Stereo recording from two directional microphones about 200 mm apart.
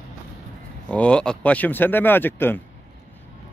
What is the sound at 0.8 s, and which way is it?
Speech, 5° left (ahead or behind).